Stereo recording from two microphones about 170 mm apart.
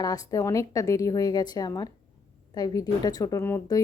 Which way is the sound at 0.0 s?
20° left (ahead or behind).